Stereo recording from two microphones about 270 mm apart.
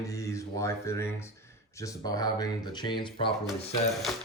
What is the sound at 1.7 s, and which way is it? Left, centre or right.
Speech, centre.